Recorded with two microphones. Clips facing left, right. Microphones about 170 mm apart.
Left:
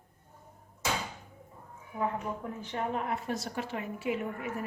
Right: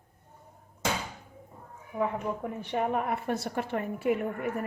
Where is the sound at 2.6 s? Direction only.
60° right (ahead or behind).